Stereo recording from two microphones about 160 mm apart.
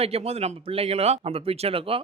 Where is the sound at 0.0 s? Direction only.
40° right (ahead or behind).